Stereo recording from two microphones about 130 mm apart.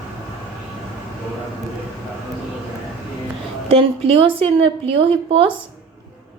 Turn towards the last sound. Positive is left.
turn(degrees=-45)  # may be behind; listen again after turning